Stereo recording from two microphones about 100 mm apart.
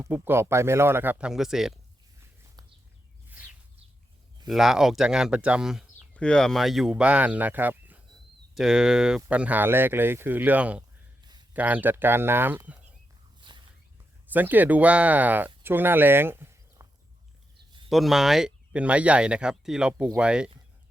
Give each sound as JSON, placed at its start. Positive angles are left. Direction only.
{"t": 0.1, "sound": "speech", "side_deg": -25}
{"t": 1.2, "sound": "speech", "side_deg": -5}
{"t": 3.2, "sound": "a sound", "side_deg": -15}
{"t": 4.4, "sound": "speech", "side_deg": -5}
{"t": 6.1, "sound": "speech", "side_deg": 10}
{"t": 6.9, "sound": "speech", "side_deg": -15}
{"t": 8.5, "sound": "speech", "side_deg": -5}
{"t": 13.4, "sound": "a sound", "side_deg": -55}
{"t": 14.3, "sound": "speech", "side_deg": -20}
{"t": 16.8, "sound": "a sound", "side_deg": -35}
{"t": 17.8, "sound": "speech", "side_deg": 0}